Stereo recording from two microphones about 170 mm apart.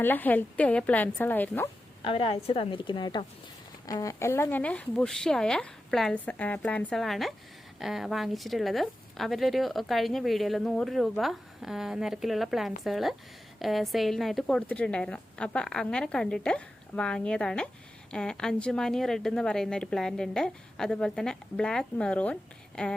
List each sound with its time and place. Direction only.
0.0 s speech: 10° left (ahead or behind)
2.0 s a woman's voice: 30° left (ahead or behind); by 23.0 s 5° left (ahead or behind)